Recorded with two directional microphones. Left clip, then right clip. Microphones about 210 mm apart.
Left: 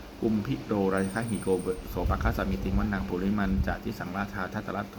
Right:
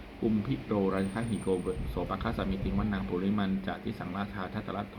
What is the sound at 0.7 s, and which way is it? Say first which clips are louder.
Speech: left 3 dB; 20° left (ahead or behind).